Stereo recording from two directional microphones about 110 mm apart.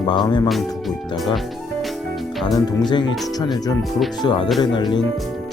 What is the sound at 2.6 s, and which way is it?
Speech, 40° left (ahead or behind).